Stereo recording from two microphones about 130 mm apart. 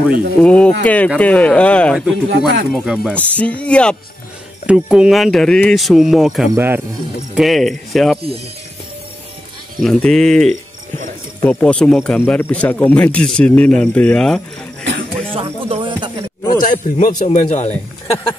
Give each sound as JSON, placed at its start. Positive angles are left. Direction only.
{"t": 0.4, "sound": "speech", "side_deg": 10}
{"t": 2.0, "sound": "a man's voice", "side_deg": 0}
{"t": 3.2, "sound": "speech", "side_deg": 10}
{"t": 4.6, "sound": "a man's voice", "side_deg": -5}
{"t": 6.5, "sound": "speech", "side_deg": -15}
{"t": 7.3, "sound": "a man's voice", "side_deg": 0}
{"t": 9.8, "sound": "a man's voice", "side_deg": 5}
{"t": 10.5, "sound": "music", "side_deg": -75}
{"t": 11.4, "sound": "speech", "side_deg": 5}
{"t": 15.3, "sound": "music", "side_deg": -45}
{"t": 16.6, "sound": "a man's voice", "side_deg": 80}